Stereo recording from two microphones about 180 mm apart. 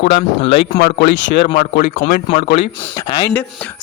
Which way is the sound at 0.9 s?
80° left.